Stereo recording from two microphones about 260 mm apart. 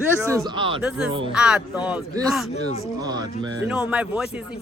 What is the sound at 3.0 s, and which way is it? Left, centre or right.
Music, centre.